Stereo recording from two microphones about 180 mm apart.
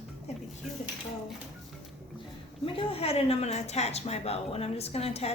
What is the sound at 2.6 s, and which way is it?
Speech, 30° left (ahead or behind).